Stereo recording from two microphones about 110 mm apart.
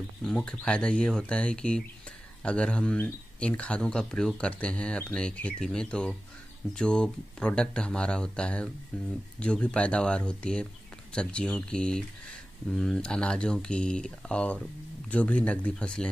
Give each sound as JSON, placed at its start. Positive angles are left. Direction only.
{"t": 0.2, "sound": "speech", "side_deg": 5}